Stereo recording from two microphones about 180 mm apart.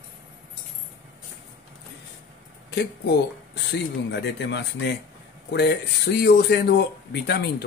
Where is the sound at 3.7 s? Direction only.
75° left (ahead or behind).